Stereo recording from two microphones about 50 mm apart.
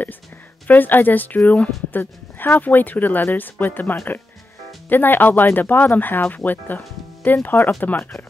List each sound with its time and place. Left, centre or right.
0.7 s speech: left